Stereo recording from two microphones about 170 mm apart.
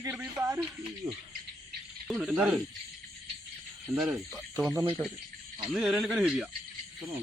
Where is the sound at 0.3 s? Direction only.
20° right (ahead or behind).